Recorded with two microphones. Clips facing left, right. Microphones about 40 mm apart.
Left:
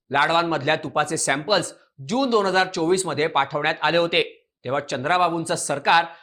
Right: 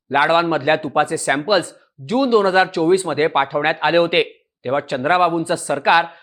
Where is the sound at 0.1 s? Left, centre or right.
Centre.